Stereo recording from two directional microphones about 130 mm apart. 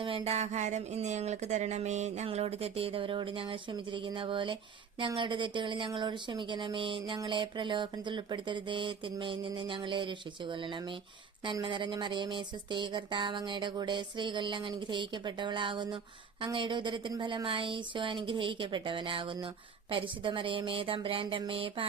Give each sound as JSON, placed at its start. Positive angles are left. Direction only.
{"t": 0.0, "sound": "speech", "side_deg": -50}
{"t": 4.9, "sound": "a sound", "side_deg": -40}
{"t": 19.9, "sound": "speech", "side_deg": -40}